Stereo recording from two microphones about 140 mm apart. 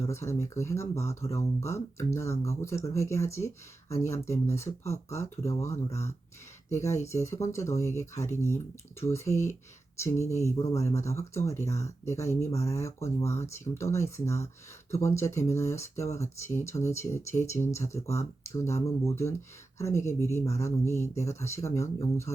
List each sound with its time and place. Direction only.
0.0 s speech: 20° left (ahead or behind)
8.1 s speech: 55° left (ahead or behind)
8.4 s speech: 20° left (ahead or behind)
10.6 s speech: 20° left (ahead or behind)